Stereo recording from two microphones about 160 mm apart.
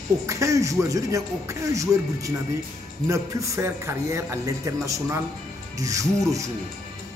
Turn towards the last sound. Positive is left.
turn(degrees=-20)  # may be behind; listen again after turning